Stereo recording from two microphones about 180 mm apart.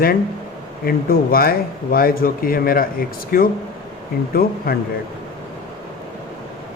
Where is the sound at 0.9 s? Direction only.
55° left (ahead or behind).